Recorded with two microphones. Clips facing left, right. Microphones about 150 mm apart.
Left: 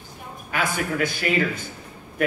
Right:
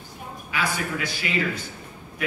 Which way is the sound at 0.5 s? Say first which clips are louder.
Left 2 dB; 50° left (ahead or behind).